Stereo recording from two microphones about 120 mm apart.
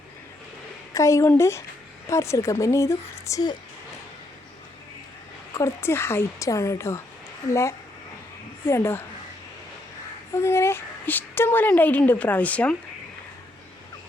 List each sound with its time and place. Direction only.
0.9 s a woman's voice: 25° left (ahead or behind)
5.5 s a woman's voice: 20° left (ahead or behind)
8.6 s a woman's voice: 20° left (ahead or behind)
10.3 s a woman's voice: 20° left (ahead or behind)